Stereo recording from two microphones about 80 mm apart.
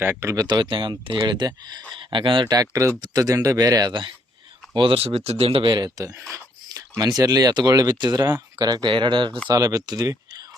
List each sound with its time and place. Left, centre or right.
0.0 s speech: right
0.3 s speech: right
0.6 s speech: right
2.1 s speech: right
2.5 s speech: right
4.7 s speech: right
5.6 s speech: right
6.0 s speech: right
7.9 s speech: right
9.5 s speech: right